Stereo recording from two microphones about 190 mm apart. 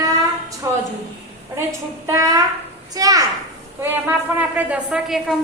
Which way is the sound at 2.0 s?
15° right (ahead or behind).